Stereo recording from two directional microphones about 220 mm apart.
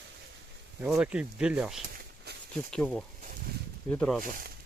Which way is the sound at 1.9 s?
50° right (ahead or behind).